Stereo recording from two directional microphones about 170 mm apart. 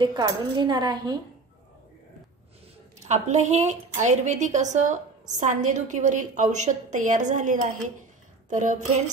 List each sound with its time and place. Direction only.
0.0 s speech: 25° right (ahead or behind)
3.0 s a woman's voice: 45° right (ahead or behind)